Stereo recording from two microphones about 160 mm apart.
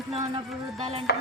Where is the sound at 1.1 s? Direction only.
90° left.